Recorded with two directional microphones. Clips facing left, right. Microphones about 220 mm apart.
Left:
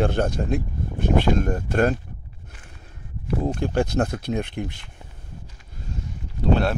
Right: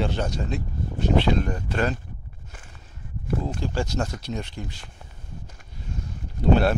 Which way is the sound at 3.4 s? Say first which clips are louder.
Left 5 dB; 60° left (ahead or behind).